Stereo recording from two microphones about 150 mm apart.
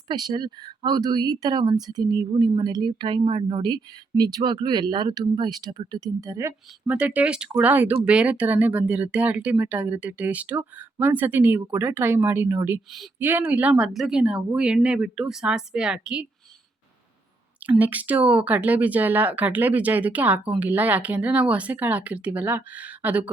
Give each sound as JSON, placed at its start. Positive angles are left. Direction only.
{"t": 0.1, "sound": "speech", "side_deg": -30}
{"t": 6.8, "sound": "a woman's voice", "side_deg": -10}
{"t": 17.7, "sound": "speech", "side_deg": -10}